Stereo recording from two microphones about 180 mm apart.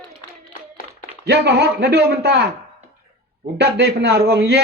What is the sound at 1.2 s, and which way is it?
A man's voice, 65° right (ahead or behind).